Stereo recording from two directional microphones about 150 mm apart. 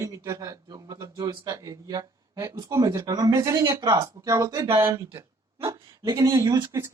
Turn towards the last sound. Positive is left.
turn(degrees=-20)  # may be behind; listen again after turning